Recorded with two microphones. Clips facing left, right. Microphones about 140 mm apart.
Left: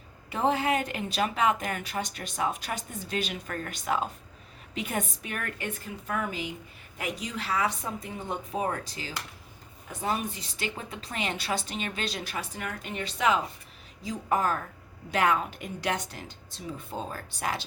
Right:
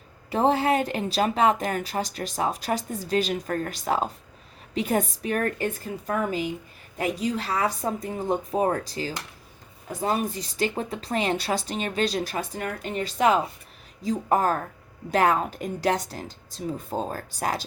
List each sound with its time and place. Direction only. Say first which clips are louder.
0.3 s a woman's voice: right 5 dB; 35° right (ahead or behind)